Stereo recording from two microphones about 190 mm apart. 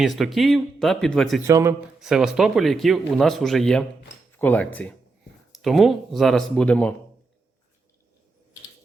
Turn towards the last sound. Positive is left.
turn(degrees=5)  # may be behind; listen again after turning